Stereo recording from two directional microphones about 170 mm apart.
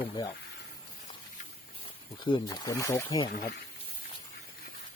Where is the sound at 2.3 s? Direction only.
25° left (ahead or behind).